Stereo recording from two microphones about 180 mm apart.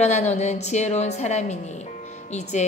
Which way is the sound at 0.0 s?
40° left (ahead or behind).